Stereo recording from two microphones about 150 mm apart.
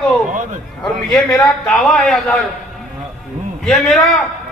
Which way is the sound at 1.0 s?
Centre (ahead or behind).